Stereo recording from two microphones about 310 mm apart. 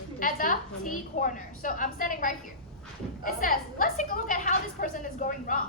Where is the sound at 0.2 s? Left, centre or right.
Left.